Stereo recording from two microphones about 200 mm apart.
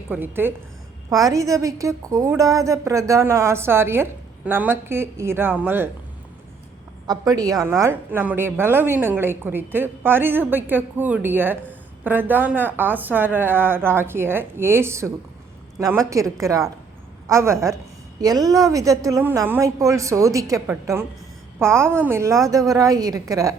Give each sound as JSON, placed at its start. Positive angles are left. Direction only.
{"t": 0.1, "sound": "a woman's voice", "side_deg": -10}
{"t": 7.1, "sound": "a woman's voice", "side_deg": -20}